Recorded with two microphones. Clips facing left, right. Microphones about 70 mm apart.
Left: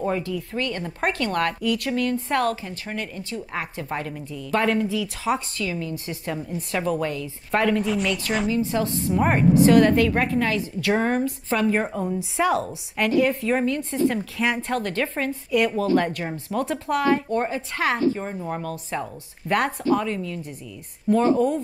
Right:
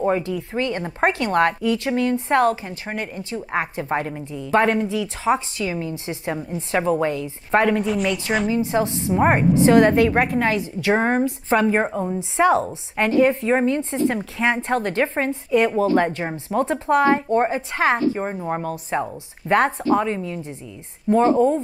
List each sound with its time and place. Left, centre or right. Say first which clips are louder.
0.0 s a woman's voice: right 4 dB; right
7.7 s a woman's voice: right 2 dB; centre
8.5 s a woman's voice: right 2 dB; right